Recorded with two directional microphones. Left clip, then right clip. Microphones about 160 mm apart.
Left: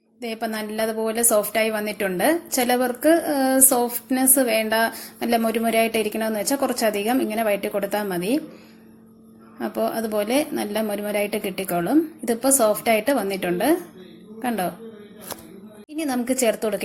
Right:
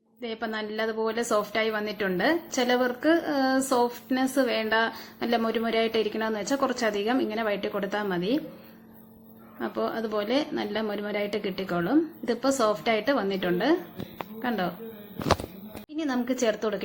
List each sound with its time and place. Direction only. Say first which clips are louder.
0.2 s a woman's voice: left 4 dB; 25° left (ahead or behind)
9.6 s a woman's voice: left 5 dB; 20° left (ahead or behind)
16.0 s a woman's voice: left 4 dB; 20° left (ahead or behind)